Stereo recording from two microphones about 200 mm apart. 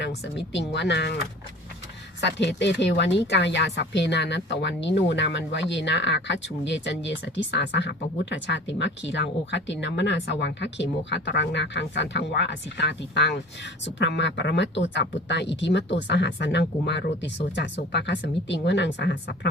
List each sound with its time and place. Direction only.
0.2 s speech: 60° left (ahead or behind)
2.2 s speech: 60° left (ahead or behind)